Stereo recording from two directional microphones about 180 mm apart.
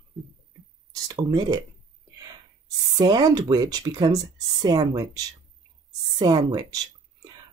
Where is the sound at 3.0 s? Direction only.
20° right (ahead or behind).